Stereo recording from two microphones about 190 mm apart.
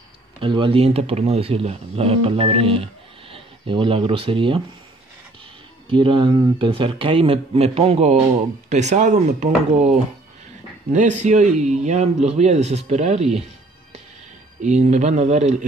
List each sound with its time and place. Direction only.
0.4 s speech: 25° right (ahead or behind)
5.9 s speech: 25° right (ahead or behind)
14.6 s speech: 40° right (ahead or behind)